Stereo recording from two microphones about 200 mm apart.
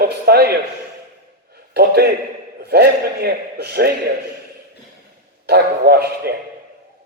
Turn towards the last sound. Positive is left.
turn(degrees=-50)  # may be behind; listen again after turning